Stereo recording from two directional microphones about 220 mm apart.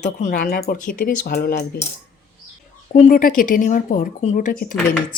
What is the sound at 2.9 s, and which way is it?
A woman's voice, 35° left (ahead or behind).